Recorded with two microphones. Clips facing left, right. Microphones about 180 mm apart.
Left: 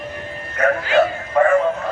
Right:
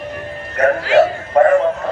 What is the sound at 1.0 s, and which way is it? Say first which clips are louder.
Music: right 4 dB; 40° right (ahead or behind).